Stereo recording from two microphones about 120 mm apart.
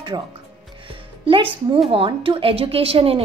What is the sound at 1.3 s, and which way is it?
A woman's voice, 45° right (ahead or behind).